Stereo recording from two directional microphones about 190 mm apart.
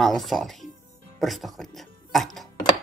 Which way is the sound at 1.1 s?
Centre (ahead or behind).